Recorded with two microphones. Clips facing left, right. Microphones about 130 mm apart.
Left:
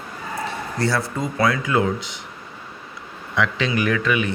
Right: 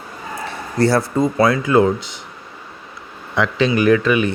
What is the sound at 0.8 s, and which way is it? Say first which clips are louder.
Speech: right 8 dB; 40° right (ahead or behind).